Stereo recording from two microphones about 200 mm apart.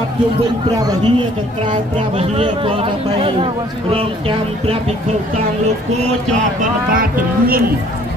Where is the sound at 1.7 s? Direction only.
30° right (ahead or behind).